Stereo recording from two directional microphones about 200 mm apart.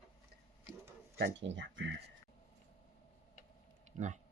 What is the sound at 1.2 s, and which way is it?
Speech, 65° right (ahead or behind).